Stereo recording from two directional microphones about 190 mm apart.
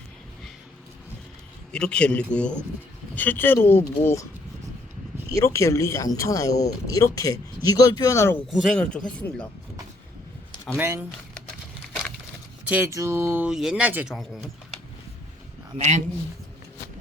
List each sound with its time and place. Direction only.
1.7 s speech: 5° left (ahead or behind)
5.5 s speech: 15° left (ahead or behind)
8.4 s speech: centre (ahead or behind)
10.8 s speech: 15° right (ahead or behind)
12.6 s speech: 10° right (ahead or behind)
15.8 s speech: 35° right (ahead or behind)